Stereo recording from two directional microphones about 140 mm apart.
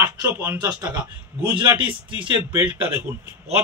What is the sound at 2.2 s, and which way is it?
Speech, 10° right (ahead or behind).